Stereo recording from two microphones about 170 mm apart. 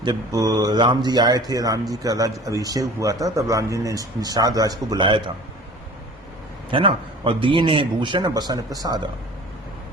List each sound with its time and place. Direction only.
0.0 s speech: 20° right (ahead or behind)
6.7 s a man's voice: 30° right (ahead or behind)